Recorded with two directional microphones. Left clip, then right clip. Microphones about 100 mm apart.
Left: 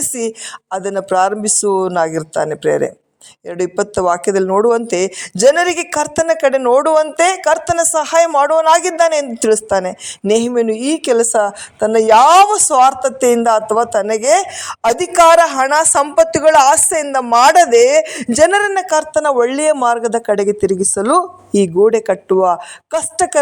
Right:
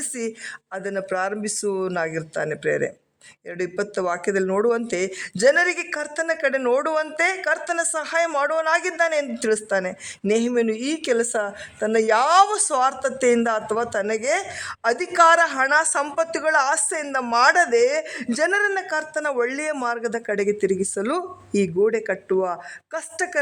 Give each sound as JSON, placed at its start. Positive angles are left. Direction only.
{"t": 0.2, "sound": "a woman's voice", "side_deg": 30}